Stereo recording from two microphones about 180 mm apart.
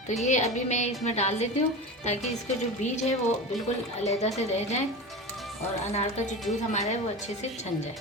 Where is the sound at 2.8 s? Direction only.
40° left (ahead or behind).